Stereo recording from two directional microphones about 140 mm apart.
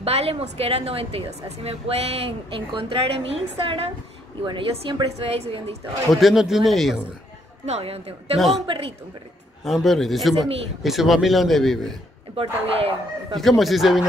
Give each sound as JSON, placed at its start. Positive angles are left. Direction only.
{"t": 0.0, "sound": "a woman's voice", "side_deg": -45}
{"t": 6.1, "sound": "speech", "side_deg": 0}
{"t": 7.6, "sound": "a woman's voice", "side_deg": -50}
{"t": 8.4, "sound": "speech", "side_deg": 0}
{"t": 8.6, "sound": "a woman's voice", "side_deg": -45}
{"t": 9.7, "sound": "speech", "side_deg": 0}
{"t": 12.4, "sound": "a woman's voice", "side_deg": -45}
{"t": 13.4, "sound": "speech", "side_deg": 0}